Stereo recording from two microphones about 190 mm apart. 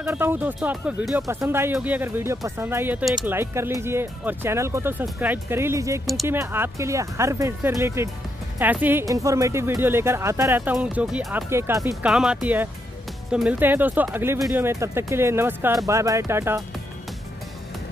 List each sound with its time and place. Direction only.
0.0 s speech: 10° right (ahead or behind)
12.1 s speech: 5° right (ahead or behind)